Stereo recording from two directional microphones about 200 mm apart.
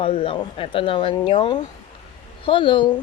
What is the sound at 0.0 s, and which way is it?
A woman's voice, 25° left (ahead or behind).